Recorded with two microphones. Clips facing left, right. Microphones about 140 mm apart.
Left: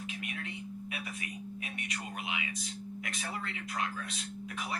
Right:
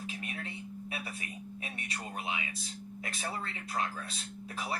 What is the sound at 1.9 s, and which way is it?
Speech, 30° right (ahead or behind).